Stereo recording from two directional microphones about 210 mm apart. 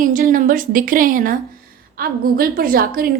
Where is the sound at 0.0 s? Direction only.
40° right (ahead or behind).